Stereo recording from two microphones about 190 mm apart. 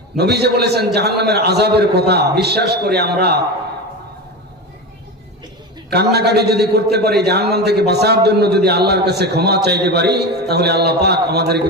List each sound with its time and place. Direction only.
0.2 s a man's voice: 60° right (ahead or behind)
5.9 s a man's voice: 60° right (ahead or behind)